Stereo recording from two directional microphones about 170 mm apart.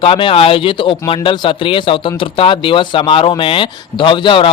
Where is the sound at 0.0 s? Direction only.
30° left (ahead or behind).